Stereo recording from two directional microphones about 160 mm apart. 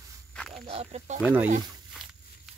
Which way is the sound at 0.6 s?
40° right (ahead or behind).